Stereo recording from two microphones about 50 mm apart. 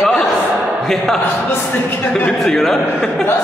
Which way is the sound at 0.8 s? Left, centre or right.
Centre.